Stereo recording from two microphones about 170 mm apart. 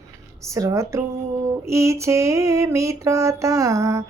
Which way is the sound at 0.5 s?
20° right (ahead or behind).